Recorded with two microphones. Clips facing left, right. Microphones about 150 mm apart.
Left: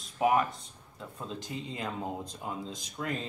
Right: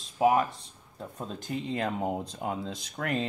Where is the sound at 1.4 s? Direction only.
60° right (ahead or behind).